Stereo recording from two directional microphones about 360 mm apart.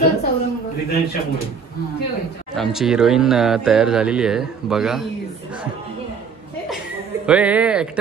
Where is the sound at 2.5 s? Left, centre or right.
Centre.